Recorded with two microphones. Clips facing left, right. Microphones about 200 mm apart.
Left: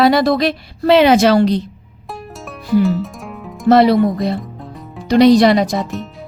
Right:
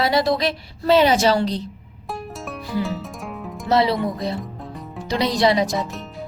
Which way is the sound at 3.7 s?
65° left (ahead or behind).